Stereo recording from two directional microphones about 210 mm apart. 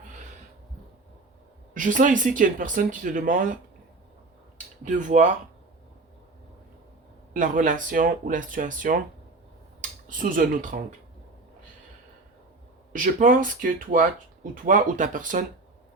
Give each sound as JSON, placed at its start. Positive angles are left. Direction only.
{"t": 1.7, "sound": "speech", "side_deg": -40}
{"t": 4.9, "sound": "speech", "side_deg": -35}
{"t": 7.3, "sound": "speech", "side_deg": -40}
{"t": 10.1, "sound": "speech", "side_deg": -40}
{"t": 12.9, "sound": "speech", "side_deg": -40}